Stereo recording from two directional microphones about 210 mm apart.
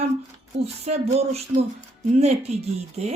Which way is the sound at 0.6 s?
30° right (ahead or behind).